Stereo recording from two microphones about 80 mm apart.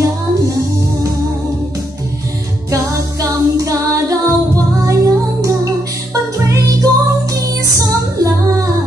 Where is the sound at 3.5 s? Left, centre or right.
Right.